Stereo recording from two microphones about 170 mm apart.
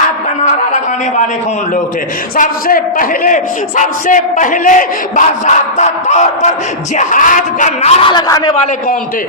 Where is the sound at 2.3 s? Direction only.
55° left (ahead or behind); by 8.5 s 25° left (ahead or behind).